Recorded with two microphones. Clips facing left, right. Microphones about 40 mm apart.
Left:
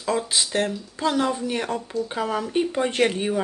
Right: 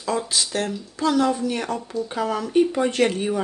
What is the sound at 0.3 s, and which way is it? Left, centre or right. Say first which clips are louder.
Speech: left 1 dB; left.